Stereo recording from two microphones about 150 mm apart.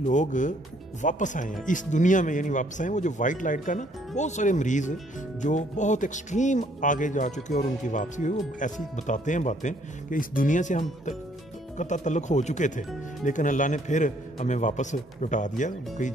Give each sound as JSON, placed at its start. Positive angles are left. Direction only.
{"t": 0.0, "sound": "speech", "side_deg": 55}